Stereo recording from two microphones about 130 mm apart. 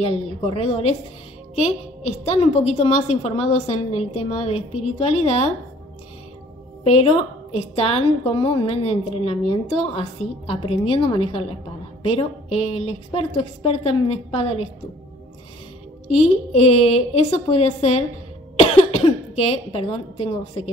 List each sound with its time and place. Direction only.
0.0 s a woman's voice: 50° left (ahead or behind)
2.0 s a woman's voice: 50° left (ahead or behind)
7.5 s a woman's voice: 50° left (ahead or behind)
16.1 s a woman's voice: 55° left (ahead or behind)